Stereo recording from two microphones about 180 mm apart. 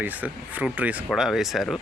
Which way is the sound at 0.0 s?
10° right (ahead or behind).